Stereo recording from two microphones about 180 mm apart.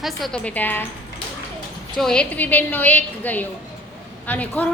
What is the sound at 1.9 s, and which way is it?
A woman's voice, 5° left (ahead or behind).